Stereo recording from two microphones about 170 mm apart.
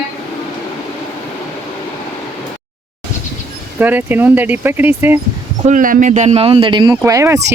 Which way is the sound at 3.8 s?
10° right (ahead or behind).